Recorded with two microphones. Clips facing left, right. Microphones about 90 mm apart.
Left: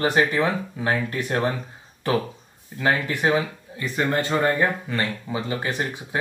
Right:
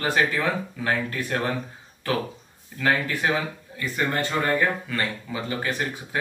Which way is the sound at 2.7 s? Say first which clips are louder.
Left 1 dB; 25° left (ahead or behind).